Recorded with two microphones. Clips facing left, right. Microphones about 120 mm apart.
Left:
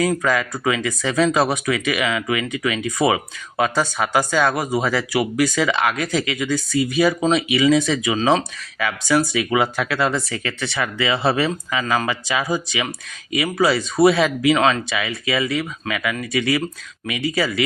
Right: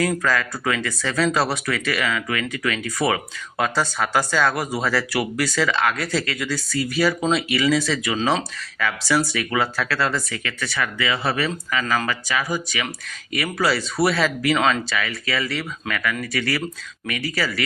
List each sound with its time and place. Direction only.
0.2 s speech: 15° left (ahead or behind)
8.1 s speech: centre (ahead or behind)
9.3 s speech: 15° left (ahead or behind)
10.3 s speech: 30° left (ahead or behind)
13.3 s speech: 15° left (ahead or behind)
14.4 s speech: 5° left (ahead or behind)
14.8 s speech: 20° left (ahead or behind)